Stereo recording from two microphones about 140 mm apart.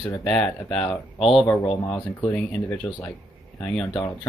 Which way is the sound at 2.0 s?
10° left (ahead or behind).